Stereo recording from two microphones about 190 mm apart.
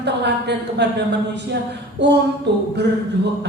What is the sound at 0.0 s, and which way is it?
A woman's voice, 65° right (ahead or behind).